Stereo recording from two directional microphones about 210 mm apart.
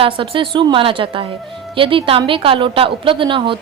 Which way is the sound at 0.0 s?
25° right (ahead or behind).